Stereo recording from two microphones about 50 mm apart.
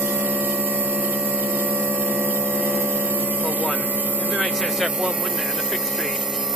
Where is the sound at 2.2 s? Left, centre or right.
Right.